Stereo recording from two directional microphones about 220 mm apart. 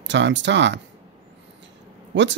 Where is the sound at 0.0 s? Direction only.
55° right (ahead or behind).